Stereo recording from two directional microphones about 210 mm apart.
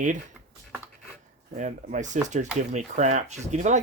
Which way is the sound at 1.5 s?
35° right (ahead or behind).